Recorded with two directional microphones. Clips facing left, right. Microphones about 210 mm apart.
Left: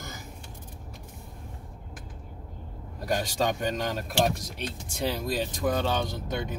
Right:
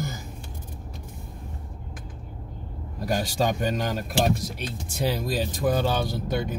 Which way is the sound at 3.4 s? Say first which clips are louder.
Right 4 dB; 10° right (ahead or behind).